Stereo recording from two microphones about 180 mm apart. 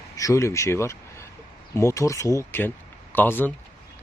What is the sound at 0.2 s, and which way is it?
Speech, 15° left (ahead or behind).